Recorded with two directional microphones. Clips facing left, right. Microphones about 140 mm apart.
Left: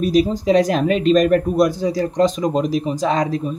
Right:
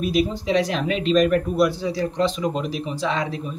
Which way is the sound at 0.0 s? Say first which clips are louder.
Left 5 dB; 40° left (ahead or behind).